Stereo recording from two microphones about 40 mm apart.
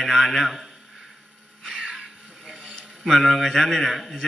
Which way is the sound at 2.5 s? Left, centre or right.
Centre.